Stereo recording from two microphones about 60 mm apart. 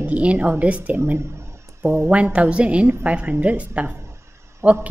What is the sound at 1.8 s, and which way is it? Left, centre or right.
Speech, right.